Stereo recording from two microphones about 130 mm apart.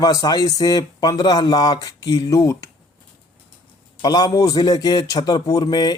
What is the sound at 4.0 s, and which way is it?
A man's voice, 30° left (ahead or behind).